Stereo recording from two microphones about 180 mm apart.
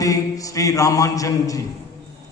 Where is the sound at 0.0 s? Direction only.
20° left (ahead or behind).